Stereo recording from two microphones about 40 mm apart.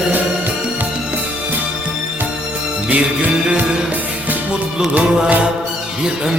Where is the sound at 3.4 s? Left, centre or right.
Right.